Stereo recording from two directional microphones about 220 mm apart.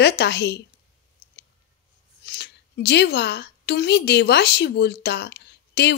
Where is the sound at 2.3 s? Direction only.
50° left (ahead or behind).